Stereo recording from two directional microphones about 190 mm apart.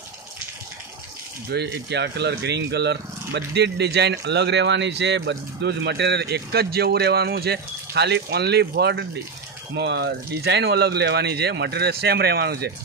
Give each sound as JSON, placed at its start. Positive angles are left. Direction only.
{"t": 1.5, "sound": "speech", "side_deg": -60}